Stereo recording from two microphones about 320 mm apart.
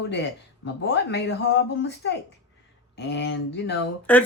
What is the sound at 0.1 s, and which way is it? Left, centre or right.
Speech, left.